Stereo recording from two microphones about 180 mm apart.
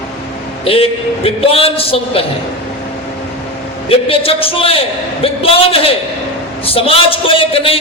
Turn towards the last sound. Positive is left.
turn(degrees=30)  # may be behind; listen again after turning